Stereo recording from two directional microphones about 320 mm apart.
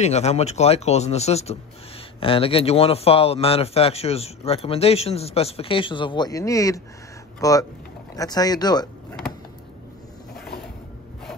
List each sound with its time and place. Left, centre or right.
0.0 s speech: centre